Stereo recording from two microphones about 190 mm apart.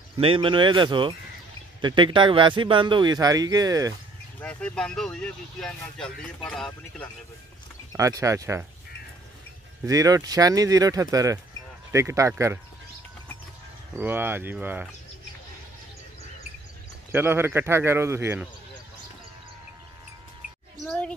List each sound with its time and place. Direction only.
0.2 s a man's voice: 25° right (ahead or behind)
4.4 s speech: 5° left (ahead or behind)
7.9 s speech: 20° right (ahead or behind)
9.8 s speech: 20° right (ahead or behind)
13.9 s speech: 10° right (ahead or behind)
17.1 s speech: 10° right (ahead or behind)
20.8 s a sound: 5° left (ahead or behind)